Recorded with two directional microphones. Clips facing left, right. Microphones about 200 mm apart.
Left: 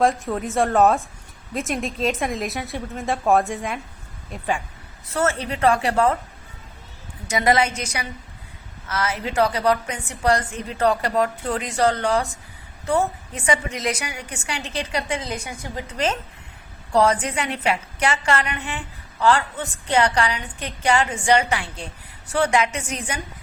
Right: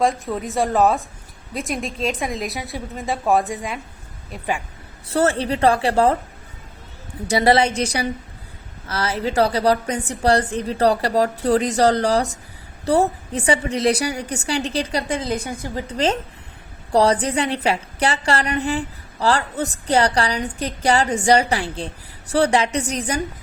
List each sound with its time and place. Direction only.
0.0 s a woman's voice: centre (ahead or behind)
5.1 s a woman's voice: 30° right (ahead or behind)
7.3 s a woman's voice: 35° right (ahead or behind)